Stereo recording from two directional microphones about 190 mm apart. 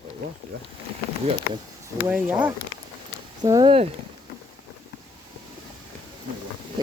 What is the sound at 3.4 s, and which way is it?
Speech, 20° right (ahead or behind).